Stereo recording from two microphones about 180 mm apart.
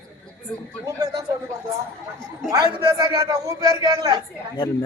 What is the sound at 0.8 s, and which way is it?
Speech, 20° right (ahead or behind).